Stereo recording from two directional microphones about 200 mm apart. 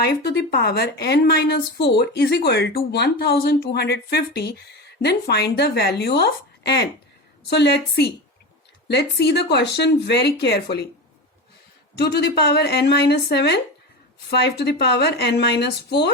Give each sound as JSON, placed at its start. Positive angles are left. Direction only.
{"t": 0.0, "sound": "a woman's voice", "side_deg": 55}
{"t": 11.9, "sound": "speech", "side_deg": 55}